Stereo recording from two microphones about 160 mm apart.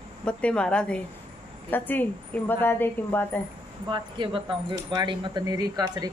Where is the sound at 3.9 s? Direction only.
30° right (ahead or behind).